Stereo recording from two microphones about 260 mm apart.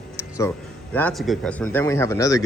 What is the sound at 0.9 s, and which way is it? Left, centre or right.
A man's voice, centre.